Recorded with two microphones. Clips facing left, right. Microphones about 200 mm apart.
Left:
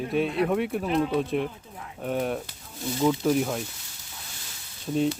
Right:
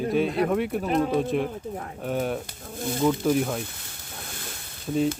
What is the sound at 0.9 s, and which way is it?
Speech, 45° right (ahead or behind).